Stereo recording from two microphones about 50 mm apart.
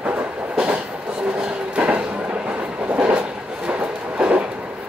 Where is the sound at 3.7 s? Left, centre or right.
Right.